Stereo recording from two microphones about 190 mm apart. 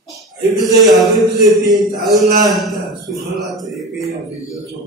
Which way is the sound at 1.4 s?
20° right (ahead or behind).